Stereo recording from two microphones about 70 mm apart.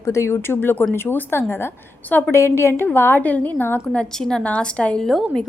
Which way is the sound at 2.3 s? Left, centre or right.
Left.